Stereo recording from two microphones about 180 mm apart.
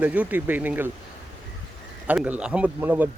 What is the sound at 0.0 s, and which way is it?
Speech, 10° right (ahead or behind).